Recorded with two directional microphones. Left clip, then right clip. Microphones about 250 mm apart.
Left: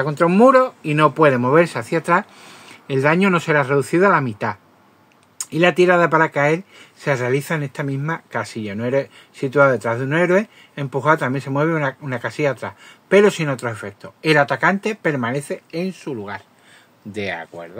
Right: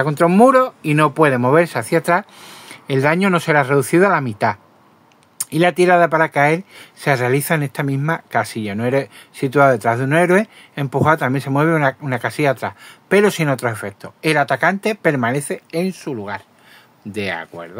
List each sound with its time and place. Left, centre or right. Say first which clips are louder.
0.0 s speech: right 1 dB; right